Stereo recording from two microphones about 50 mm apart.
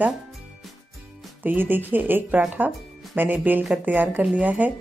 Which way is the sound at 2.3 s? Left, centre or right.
Right.